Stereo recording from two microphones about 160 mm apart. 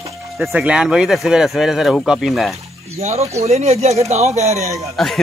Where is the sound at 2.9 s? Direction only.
40° right (ahead or behind).